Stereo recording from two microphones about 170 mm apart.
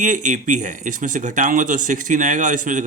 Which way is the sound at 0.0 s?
50° right (ahead or behind).